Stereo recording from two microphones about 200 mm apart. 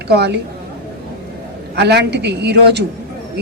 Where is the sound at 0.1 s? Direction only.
55° right (ahead or behind).